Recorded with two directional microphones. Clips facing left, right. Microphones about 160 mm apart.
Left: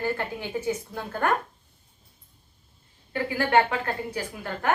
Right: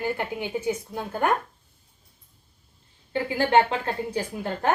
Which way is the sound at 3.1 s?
25° right (ahead or behind).